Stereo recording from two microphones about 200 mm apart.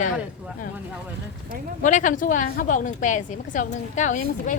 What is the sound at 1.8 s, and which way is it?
A woman's voice, 40° left (ahead or behind).